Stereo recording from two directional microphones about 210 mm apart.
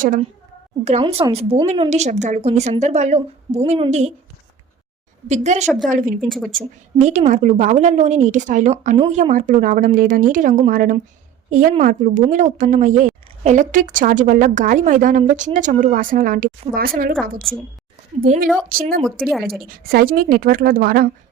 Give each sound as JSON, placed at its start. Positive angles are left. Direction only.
{"t": 0.0, "sound": "a woman's voice", "side_deg": -40}
{"t": 5.3, "sound": "a woman's voice", "side_deg": -35}
{"t": 18.1, "sound": "a woman's voice", "side_deg": -30}
{"t": 18.7, "sound": "a woman's voice", "side_deg": -40}
{"t": 19.2, "sound": "speech", "side_deg": 0}
{"t": 19.6, "sound": "a woman's voice", "side_deg": -45}